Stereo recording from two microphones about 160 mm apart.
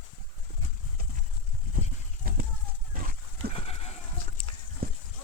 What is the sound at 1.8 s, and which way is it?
Horse, 65° right (ahead or behind).